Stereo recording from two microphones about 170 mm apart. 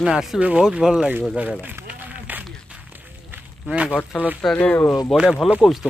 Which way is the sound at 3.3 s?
10° right (ahead or behind).